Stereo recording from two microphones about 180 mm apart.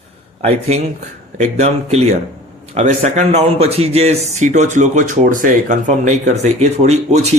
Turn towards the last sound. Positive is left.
turn(degrees=-40)  # may be behind; listen again after turning